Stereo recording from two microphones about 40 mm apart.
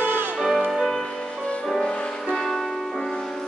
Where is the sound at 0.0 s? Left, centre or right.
Right.